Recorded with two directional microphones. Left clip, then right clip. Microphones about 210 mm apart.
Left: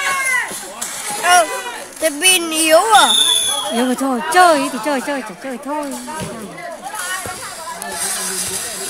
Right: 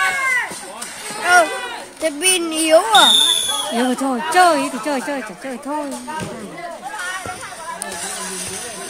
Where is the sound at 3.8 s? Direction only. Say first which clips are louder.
Even; 15° left (ahead or behind).